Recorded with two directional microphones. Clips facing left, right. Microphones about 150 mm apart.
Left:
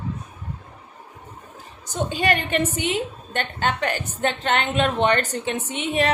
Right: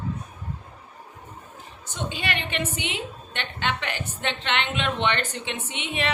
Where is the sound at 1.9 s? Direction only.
45° left (ahead or behind).